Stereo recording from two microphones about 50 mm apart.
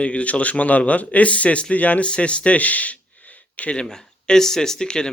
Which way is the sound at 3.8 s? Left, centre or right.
Centre.